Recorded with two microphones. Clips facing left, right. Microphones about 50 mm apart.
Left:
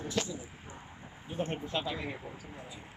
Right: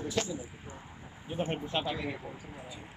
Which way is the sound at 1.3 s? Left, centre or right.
Centre.